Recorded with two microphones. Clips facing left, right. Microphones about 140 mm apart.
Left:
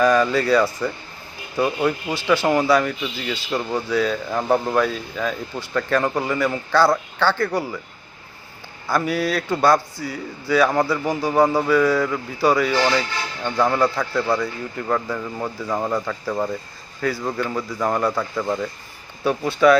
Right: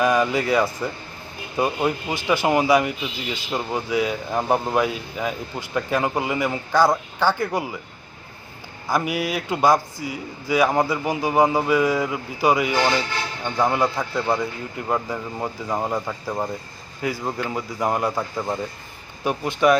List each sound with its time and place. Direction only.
0.0 s speech: 15° right (ahead or behind)
8.9 s a man's voice: 15° right (ahead or behind)